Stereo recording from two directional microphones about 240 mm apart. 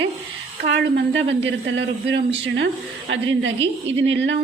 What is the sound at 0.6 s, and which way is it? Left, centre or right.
A woman's voice, right.